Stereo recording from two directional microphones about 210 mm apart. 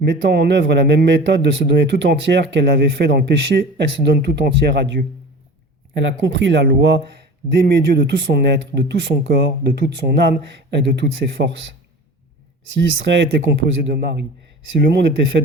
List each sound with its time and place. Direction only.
0.2 s a man's voice: 50° right (ahead or behind)
12.8 s a man's voice: 55° right (ahead or behind)